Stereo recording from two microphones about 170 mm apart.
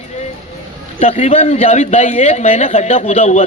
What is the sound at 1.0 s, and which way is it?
Speech, 40° left (ahead or behind).